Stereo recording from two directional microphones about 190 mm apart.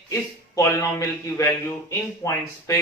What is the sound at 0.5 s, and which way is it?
A man's voice, 15° left (ahead or behind).